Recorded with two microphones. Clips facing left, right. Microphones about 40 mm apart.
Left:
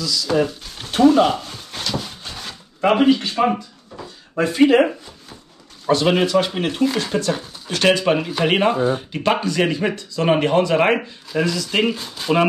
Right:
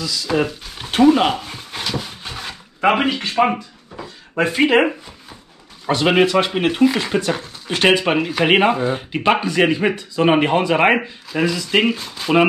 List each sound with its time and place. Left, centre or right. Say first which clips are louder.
0.5 s a sound: right 2 dB; centre
1.0 s speech: even; right
1.3 s dog: even; centre
2.8 s speech: left 2 dB; right
3.5 s drawer open or close: right 1 dB; centre
4.4 s speech: left 1 dB; right
8.2 s speech: right 3 dB; centre
8.5 s speech: right 1 dB; centre
11.9 s speech: right 1 dB; centre